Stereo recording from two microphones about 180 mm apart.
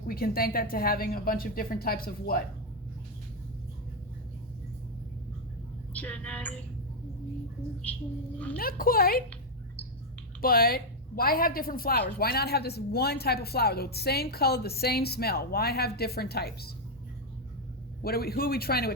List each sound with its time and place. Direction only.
0.1 s a woman's voice: 55° left (ahead or behind)
5.9 s speech: 10° left (ahead or behind)
8.5 s a woman's voice: 55° left (ahead or behind)
10.4 s a woman's voice: 55° left (ahead or behind)
18.0 s a woman's voice: 60° left (ahead or behind)